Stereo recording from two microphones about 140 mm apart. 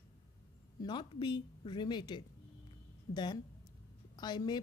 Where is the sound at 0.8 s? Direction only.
35° left (ahead or behind).